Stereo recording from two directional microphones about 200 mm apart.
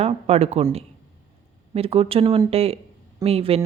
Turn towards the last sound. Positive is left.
turn(degrees=-30)  # may be behind; listen again after turning